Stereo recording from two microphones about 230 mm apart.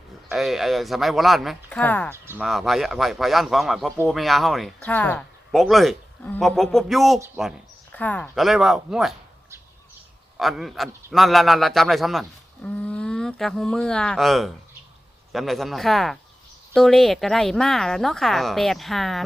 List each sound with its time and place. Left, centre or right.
0.3 s a man's voice: centre
2.1 s a man's voice: centre
10.3 s a man's voice: centre